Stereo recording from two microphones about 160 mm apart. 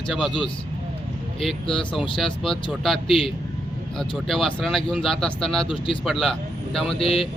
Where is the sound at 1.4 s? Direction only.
Centre (ahead or behind).